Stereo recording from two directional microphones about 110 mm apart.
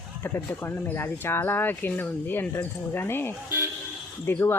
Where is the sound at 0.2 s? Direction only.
20° left (ahead or behind).